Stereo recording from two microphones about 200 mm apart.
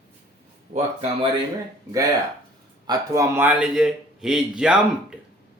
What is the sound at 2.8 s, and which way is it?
A man's voice, 20° right (ahead or behind).